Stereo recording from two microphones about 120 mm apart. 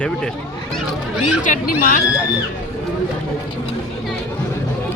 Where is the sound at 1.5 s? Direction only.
90° left.